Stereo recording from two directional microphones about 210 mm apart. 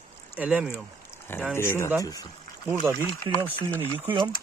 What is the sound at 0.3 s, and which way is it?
Speech, 5° right (ahead or behind).